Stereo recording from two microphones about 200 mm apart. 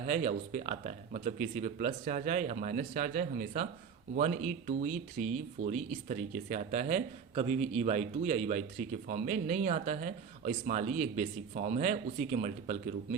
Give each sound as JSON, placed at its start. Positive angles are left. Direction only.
{"t": 0.0, "sound": "speech", "side_deg": -35}